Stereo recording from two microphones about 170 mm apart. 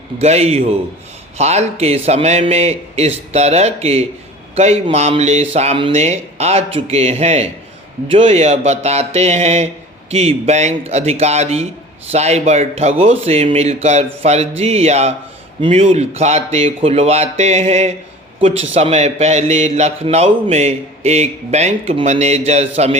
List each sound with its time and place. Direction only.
0.2 s a man's voice: 40° right (ahead or behind)